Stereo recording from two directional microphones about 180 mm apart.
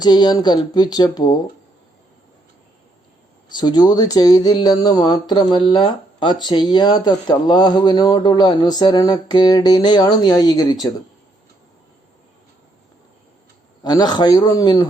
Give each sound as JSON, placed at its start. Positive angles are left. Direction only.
{"t": 0.0, "sound": "speech", "side_deg": 25}
{"t": 3.5, "sound": "speech", "side_deg": 25}
{"t": 13.8, "sound": "speech", "side_deg": 25}